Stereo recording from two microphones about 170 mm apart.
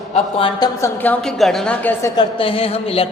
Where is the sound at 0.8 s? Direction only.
15° left (ahead or behind).